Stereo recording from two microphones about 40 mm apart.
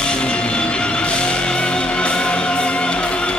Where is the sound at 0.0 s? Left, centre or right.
Left.